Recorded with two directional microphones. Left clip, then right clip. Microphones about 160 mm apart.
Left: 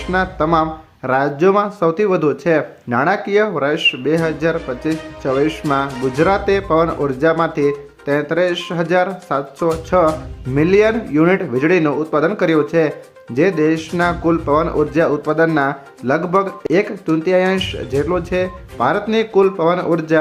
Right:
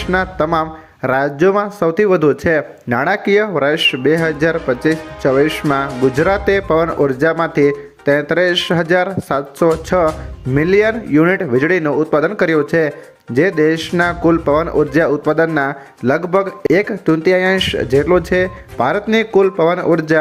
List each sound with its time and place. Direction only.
0.1 s speech: 30° right (ahead or behind)